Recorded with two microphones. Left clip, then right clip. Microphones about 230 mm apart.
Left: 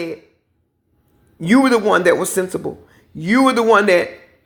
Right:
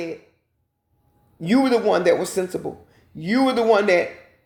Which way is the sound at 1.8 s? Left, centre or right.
Left.